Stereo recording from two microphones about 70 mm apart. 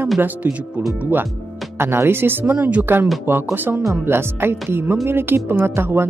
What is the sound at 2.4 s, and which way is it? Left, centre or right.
Speech, right.